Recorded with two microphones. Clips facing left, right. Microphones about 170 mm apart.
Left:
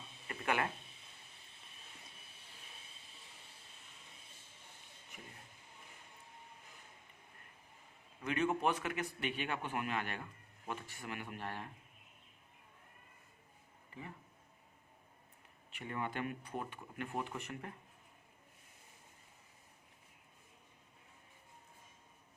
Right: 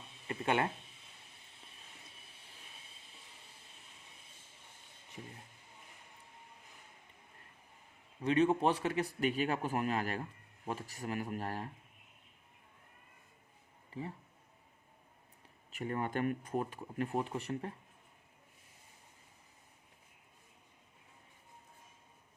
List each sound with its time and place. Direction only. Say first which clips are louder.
0.3 s a sound: right 4 dB; 30° right (ahead or behind)
8.2 s a man's voice: right 5 dB; 30° right (ahead or behind)
13.9 s speech: right 8 dB; 35° right (ahead or behind)
15.7 s a man's voice: right 5 dB; 40° right (ahead or behind)